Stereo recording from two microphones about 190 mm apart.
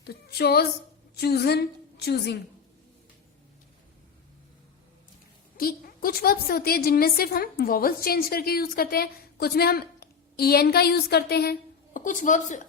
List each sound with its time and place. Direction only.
0.1 s a sound: 55° left (ahead or behind)
1.1 s a woman's voice: 55° left (ahead or behind)
5.5 s a woman's voice: 50° left (ahead or behind)
11.9 s a woman's voice: 45° left (ahead or behind)